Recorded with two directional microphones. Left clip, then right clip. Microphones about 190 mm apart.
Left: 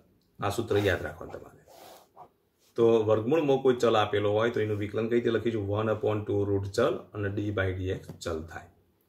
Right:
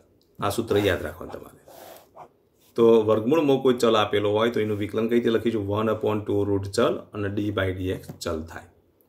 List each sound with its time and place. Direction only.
0.4 s speech: 45° right (ahead or behind)
2.7 s speech: 45° right (ahead or behind)